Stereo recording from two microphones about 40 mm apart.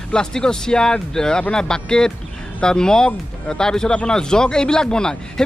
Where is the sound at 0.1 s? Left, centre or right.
Centre.